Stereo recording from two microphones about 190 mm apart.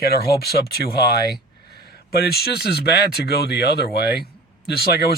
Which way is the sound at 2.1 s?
55° left (ahead or behind).